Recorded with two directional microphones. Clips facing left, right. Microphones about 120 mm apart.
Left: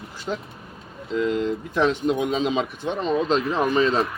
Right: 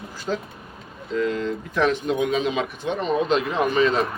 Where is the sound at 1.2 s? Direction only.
20° left (ahead or behind).